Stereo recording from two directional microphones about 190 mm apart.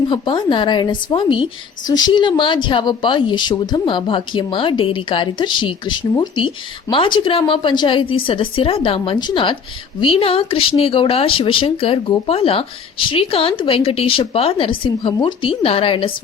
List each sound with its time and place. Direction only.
0.1 s speech: 25° left (ahead or behind)